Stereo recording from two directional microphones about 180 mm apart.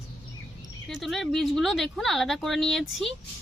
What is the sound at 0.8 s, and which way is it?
Speech, centre (ahead or behind).